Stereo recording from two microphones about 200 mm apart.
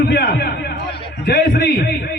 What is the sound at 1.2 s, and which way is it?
Speech, 60° left (ahead or behind).